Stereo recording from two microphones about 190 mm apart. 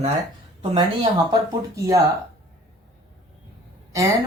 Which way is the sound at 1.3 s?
15° right (ahead or behind).